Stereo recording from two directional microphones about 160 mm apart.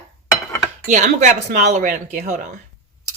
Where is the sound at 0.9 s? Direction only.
50° right (ahead or behind).